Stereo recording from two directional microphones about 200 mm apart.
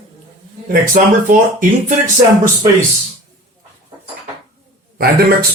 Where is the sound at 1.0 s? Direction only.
40° right (ahead or behind).